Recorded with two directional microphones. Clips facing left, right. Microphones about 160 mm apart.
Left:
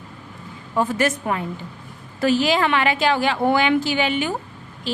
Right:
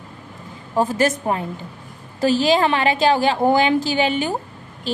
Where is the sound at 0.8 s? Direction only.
35° right (ahead or behind).